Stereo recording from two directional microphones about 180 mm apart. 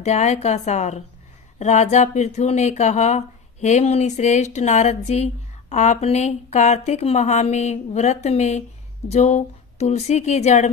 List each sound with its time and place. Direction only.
0.0 s speech: 40° left (ahead or behind)